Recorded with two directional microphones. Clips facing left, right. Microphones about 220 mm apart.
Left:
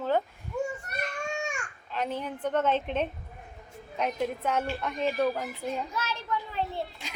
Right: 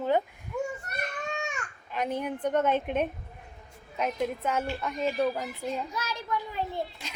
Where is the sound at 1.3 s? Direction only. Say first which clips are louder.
Left 1 dB; 15° left (ahead or behind).